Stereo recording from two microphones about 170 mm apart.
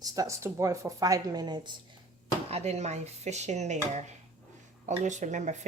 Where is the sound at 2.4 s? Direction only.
40° right (ahead or behind).